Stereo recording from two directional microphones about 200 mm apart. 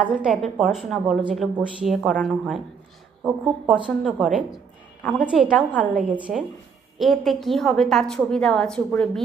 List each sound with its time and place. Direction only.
0.0 s a woman's voice: 5° right (ahead or behind)
3.7 s a woman's voice: 5° right (ahead or behind)